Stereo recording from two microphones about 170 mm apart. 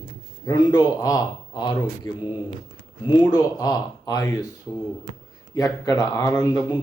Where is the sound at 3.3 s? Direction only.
20° left (ahead or behind).